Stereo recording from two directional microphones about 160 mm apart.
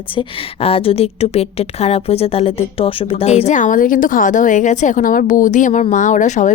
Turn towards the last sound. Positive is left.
turn(degrees=50)  # may be behind; listen again after turning